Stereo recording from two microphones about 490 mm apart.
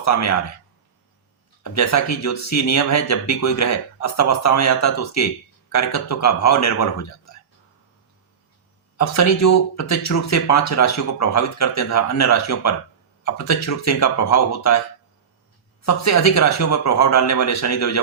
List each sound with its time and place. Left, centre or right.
0.0 s speech: left
1.6 s speech: left
9.0 s speech: left
15.8 s speech: left